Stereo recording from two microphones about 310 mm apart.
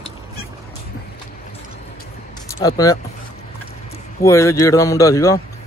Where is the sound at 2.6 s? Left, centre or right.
Centre.